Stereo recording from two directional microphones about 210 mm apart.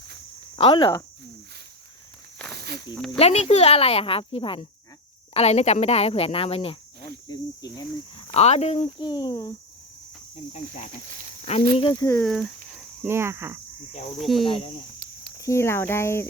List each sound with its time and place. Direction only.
0.5 s speech: 25° left (ahead or behind)
2.5 s snake: 50° right (ahead or behind)
3.2 s speech: 30° left (ahead or behind)
8.3 s speech: 30° left (ahead or behind)
11.7 s speech: 25° left (ahead or behind)
12.0 s speech: 10° left (ahead or behind)
13.0 s speech: 10° right (ahead or behind)
14.2 s speech: centre (ahead or behind)
14.4 s speech: 25° left (ahead or behind)
15.4 s speech: 15° left (ahead or behind)